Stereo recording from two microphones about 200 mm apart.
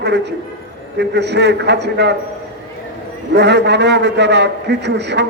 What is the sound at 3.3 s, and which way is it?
A man's voice, 60° right (ahead or behind).